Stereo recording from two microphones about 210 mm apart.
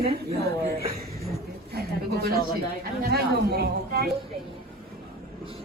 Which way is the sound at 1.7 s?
45° right (ahead or behind).